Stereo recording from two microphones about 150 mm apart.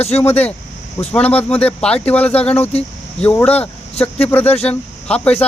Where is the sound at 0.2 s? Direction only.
10° left (ahead or behind).